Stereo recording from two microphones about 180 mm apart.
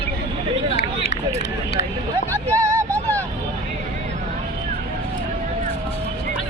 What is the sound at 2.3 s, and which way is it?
Vehicle, 15° right (ahead or behind).